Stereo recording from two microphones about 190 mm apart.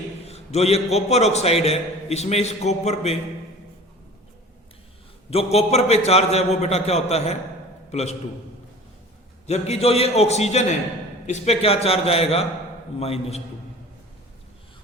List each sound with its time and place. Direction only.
0.3 s a man's voice: 35° left (ahead or behind)
5.3 s a man's voice: 35° left (ahead or behind)
9.5 s a man's voice: 35° left (ahead or behind)